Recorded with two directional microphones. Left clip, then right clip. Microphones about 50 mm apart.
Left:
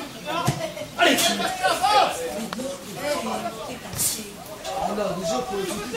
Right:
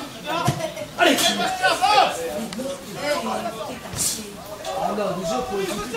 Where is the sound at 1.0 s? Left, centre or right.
Left.